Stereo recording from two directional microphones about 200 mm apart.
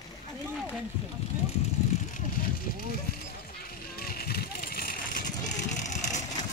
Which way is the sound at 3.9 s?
50° left (ahead or behind).